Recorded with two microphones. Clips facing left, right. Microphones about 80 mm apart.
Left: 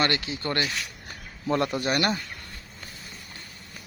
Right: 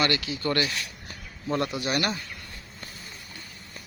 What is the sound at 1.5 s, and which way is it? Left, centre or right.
Speech, left.